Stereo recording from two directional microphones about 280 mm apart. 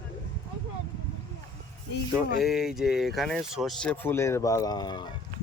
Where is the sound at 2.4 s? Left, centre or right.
Centre.